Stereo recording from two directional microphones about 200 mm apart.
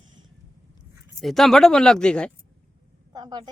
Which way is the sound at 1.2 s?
Centre (ahead or behind).